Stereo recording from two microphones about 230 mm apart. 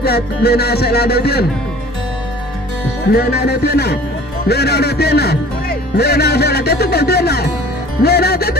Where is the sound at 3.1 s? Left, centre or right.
Left.